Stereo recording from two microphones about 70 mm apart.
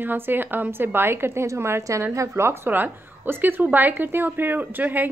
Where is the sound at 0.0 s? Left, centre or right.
Right.